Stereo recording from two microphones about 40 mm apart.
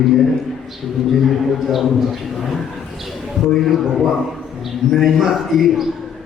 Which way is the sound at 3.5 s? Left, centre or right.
Centre.